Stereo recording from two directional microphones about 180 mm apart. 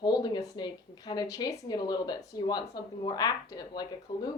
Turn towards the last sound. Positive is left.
turn(degrees=20)  # may be behind; listen again after turning